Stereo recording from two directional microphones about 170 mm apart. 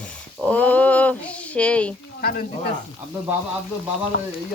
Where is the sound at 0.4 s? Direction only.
10° left (ahead or behind).